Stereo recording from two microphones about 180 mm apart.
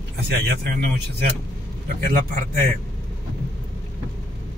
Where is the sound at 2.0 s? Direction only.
50° right (ahead or behind).